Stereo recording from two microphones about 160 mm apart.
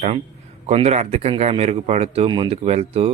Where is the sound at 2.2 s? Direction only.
30° right (ahead or behind).